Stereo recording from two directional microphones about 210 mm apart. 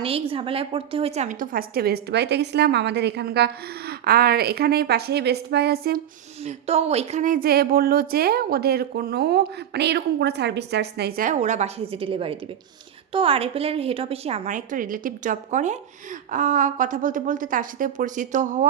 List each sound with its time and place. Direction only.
0.0 s a woman's voice: 25° right (ahead or behind); by 6.0 s 45° right (ahead or behind)
6.4 s a woman's voice: 30° right (ahead or behind)